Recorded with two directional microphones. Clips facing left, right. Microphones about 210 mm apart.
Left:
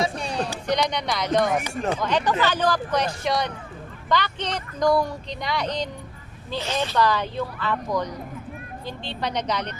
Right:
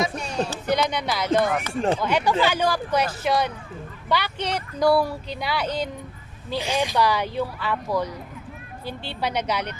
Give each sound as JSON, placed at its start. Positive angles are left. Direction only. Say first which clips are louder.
{"t": 0.0, "sound": "speech", "louder": "even", "side_deg": 35}
{"t": 0.7, "sound": "speech", "louder": "even", "side_deg": -5}